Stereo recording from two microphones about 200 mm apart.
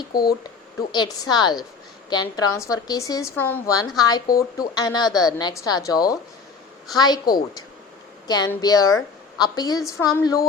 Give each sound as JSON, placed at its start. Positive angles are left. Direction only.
{"t": 0.1, "sound": "speech", "side_deg": 50}
{"t": 0.4, "sound": "a woman's voice", "side_deg": 20}